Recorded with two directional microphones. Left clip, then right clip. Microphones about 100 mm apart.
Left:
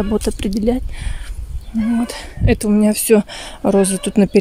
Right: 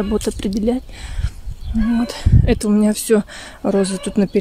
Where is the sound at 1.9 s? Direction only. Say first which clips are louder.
Right 1 dB; 5° left (ahead or behind).